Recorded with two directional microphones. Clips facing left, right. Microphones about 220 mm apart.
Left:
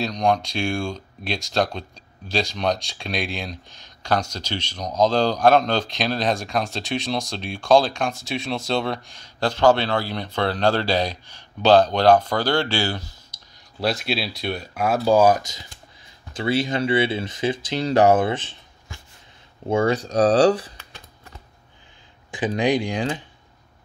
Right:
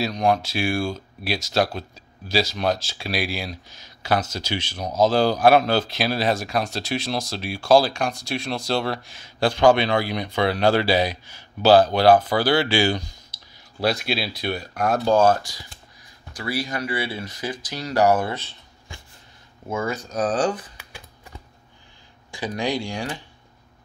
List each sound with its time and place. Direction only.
0.0 s speech: 5° right (ahead or behind)
13.7 s speech: centre (ahead or behind); by 18.6 s 20° left (ahead or behind)
20.1 s speech: 35° left (ahead or behind)
20.7 s computer keyboard: 10° right (ahead or behind)
22.3 s speech: 20° left (ahead or behind)